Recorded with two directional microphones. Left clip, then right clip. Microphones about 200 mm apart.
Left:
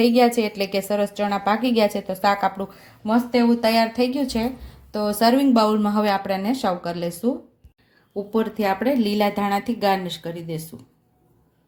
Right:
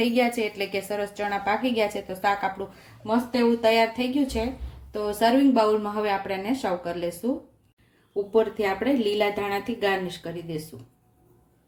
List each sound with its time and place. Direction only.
0.0 s a woman's voice: 40° left (ahead or behind)
8.3 s a woman's voice: 40° left (ahead or behind)